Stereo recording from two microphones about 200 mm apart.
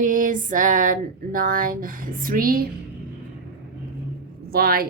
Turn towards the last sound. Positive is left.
turn(degrees=-50)  # may be behind; listen again after turning